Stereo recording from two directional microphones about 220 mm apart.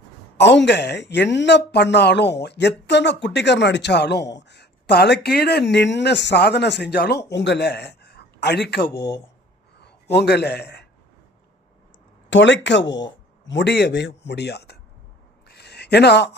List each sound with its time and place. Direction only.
0.3 s a man's voice: 50° left (ahead or behind)
12.3 s speech: 55° left (ahead or behind)
15.4 s a sound: 50° left (ahead or behind)